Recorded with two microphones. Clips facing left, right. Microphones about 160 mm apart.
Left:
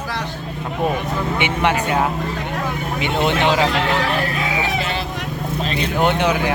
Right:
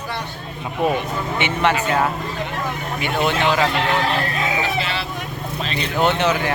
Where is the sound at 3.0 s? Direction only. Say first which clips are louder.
Left 1 dB; 20° left (ahead or behind).